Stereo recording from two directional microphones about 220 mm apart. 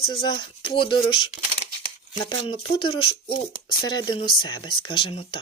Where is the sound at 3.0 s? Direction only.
25° left (ahead or behind).